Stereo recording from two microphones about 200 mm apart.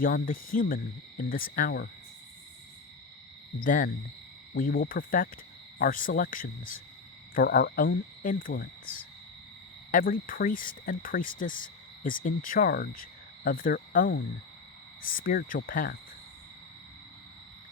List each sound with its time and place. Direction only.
0.0 s speech: 45° left (ahead or behind)
3.6 s speech: 45° left (ahead or behind)
9.9 s speech: 45° left (ahead or behind)